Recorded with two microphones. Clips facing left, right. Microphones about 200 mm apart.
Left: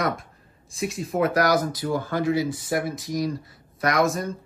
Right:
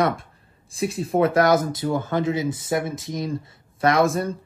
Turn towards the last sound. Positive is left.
turn(degrees=-30)  # may be behind; listen again after turning